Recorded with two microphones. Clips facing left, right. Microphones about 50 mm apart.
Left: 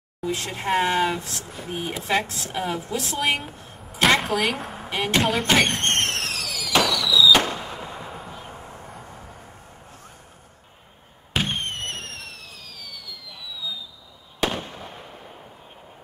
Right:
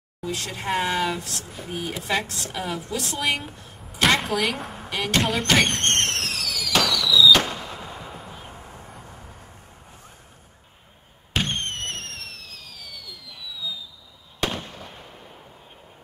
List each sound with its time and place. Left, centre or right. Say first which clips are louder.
0.2 s a woman's voice: left 2 dB; left
2.2 s a woman's voice: even; right
2.5 s a woman's voice: left 2 dB; centre
3.7 s a sound: left 1 dB; centre
4.8 s a sound: left 1 dB; centre
5.2 s speech: left 1 dB; centre
6.7 s fireworks: left 1 dB; centre
8.3 s vehicle: left 2 dB; centre
8.5 s vehicle: left 2 dB; centre
11.3 s fireworks: even; centre